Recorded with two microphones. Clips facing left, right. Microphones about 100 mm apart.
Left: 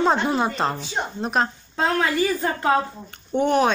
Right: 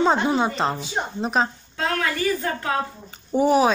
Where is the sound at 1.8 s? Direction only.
25° left (ahead or behind).